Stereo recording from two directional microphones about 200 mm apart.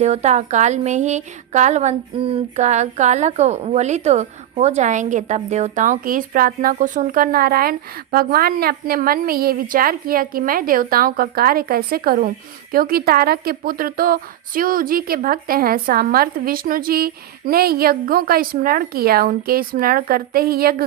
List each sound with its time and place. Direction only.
0.0 s a woman's voice: 35° right (ahead or behind)